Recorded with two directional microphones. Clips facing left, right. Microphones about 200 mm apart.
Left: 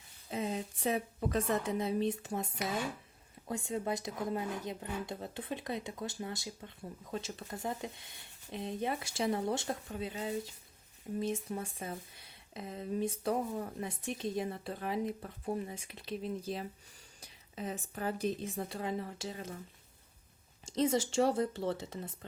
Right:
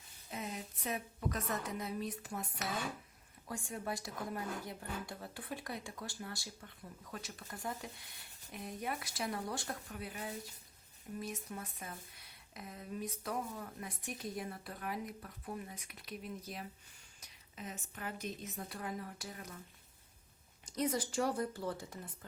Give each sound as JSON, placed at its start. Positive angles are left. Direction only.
{"t": 0.3, "sound": "a woman's voice", "side_deg": 30}
{"t": 20.7, "sound": "speech", "side_deg": 25}